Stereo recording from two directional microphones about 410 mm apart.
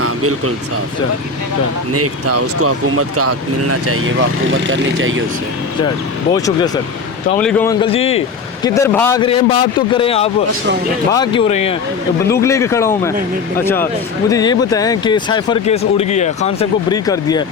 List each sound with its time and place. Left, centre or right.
0.0 s a sound: right
1.9 s speech: right
6.3 s speech: centre
14.3 s speech: centre